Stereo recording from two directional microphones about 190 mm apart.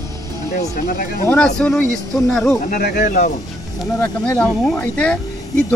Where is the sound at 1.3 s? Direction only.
5° left (ahead or behind).